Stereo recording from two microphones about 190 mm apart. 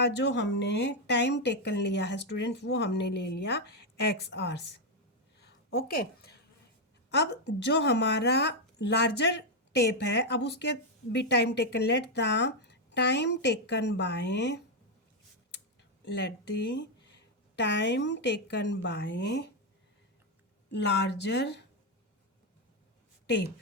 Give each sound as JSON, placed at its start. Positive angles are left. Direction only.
{"t": 0.0, "sound": "speech", "side_deg": 65}
{"t": 5.4, "sound": "a sound", "side_deg": 55}
{"t": 7.1, "sound": "speech", "side_deg": 65}
{"t": 16.0, "sound": "a woman's voice", "side_deg": 65}
{"t": 20.7, "sound": "speech", "side_deg": 65}
{"t": 23.2, "sound": "a woman's voice", "side_deg": 60}